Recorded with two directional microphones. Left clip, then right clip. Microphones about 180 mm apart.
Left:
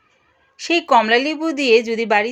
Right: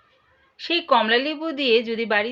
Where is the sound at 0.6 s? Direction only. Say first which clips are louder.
Left 5 dB; 40° left (ahead or behind).